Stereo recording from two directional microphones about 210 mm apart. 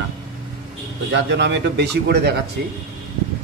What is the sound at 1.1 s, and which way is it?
A man's voice, 55° right (ahead or behind).